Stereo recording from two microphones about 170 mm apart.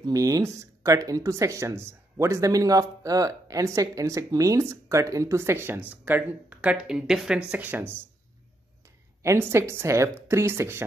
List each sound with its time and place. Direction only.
0.0 s speech: 20° right (ahead or behind)
9.2 s speech: 15° right (ahead or behind)